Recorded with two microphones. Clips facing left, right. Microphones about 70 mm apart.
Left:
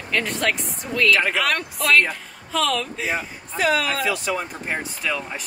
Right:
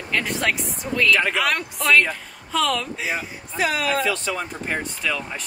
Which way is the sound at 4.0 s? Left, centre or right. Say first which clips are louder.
Even; centre.